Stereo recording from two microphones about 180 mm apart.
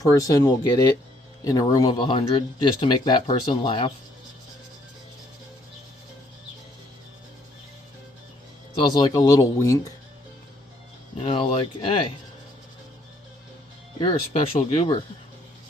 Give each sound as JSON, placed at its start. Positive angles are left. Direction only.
{"t": 0.0, "sound": "speech", "side_deg": 20}
{"t": 8.9, "sound": "speech", "side_deg": 25}
{"t": 11.2, "sound": "speech", "side_deg": 30}
{"t": 14.0, "sound": "speech", "side_deg": 25}